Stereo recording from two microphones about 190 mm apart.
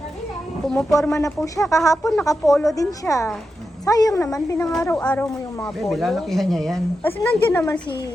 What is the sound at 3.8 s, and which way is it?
A woman's voice, 20° left (ahead or behind).